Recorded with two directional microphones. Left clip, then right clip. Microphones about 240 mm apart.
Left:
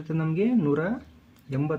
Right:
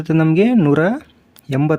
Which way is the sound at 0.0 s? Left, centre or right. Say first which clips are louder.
Right 13 dB; right.